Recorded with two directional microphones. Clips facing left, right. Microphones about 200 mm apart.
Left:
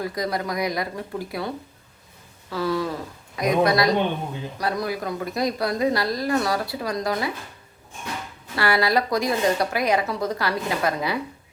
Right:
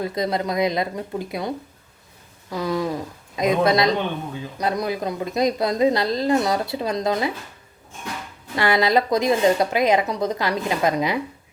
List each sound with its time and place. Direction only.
0.0 s a woman's voice: 25° right (ahead or behind)
8.5 s a woman's voice: 20° right (ahead or behind)